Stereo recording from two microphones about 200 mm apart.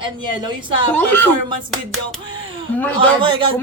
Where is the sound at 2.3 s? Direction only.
25° right (ahead or behind).